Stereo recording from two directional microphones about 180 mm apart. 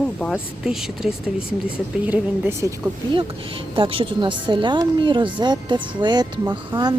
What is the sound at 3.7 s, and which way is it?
Speech, 30° right (ahead or behind).